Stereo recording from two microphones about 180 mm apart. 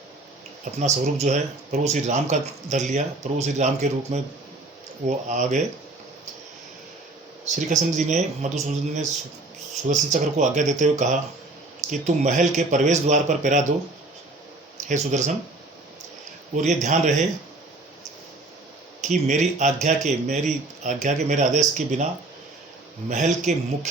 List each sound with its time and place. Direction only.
0.6 s speech: 45° right (ahead or behind)
7.4 s speech: 45° right (ahead or behind)
14.8 s speech: 40° right (ahead or behind)
16.6 s speech: 40° right (ahead or behind)
19.0 s speech: 40° right (ahead or behind)
23.0 s speech: 40° right (ahead or behind)